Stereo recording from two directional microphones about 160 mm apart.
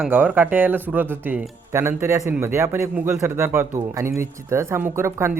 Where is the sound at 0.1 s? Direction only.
10° right (ahead or behind).